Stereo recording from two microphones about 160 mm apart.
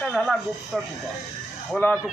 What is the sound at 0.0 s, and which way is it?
A man's voice, centre (ahead or behind).